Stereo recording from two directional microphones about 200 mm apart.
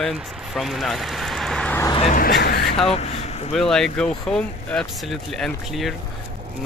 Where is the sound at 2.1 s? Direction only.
45° left (ahead or behind).